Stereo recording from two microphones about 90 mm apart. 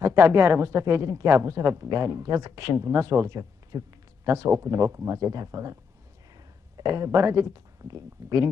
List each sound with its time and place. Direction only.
0.0 s speech: 30° right (ahead or behind)